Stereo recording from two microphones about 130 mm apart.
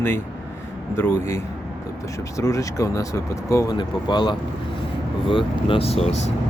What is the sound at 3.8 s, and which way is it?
Speech, 35° left (ahead or behind).